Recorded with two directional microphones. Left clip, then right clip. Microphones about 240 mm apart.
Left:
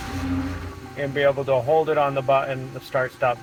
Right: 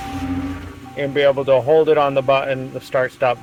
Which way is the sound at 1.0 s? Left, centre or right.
Right.